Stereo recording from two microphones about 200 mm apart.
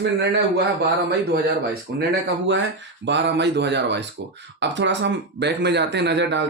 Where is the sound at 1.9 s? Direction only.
55° right (ahead or behind).